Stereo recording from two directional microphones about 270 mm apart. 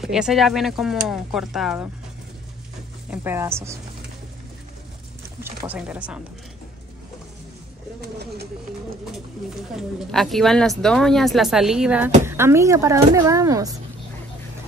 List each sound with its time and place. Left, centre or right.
0.0 s a woman's voice: centre
3.1 s speech: centre
5.7 s a woman's voice: centre
8.0 s bird: right
9.8 s a woman's voice: centre